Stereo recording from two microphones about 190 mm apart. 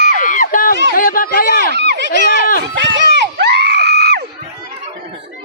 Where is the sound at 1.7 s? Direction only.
65° right (ahead or behind).